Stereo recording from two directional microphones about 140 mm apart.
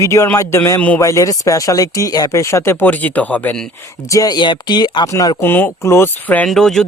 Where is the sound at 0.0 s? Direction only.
20° left (ahead or behind).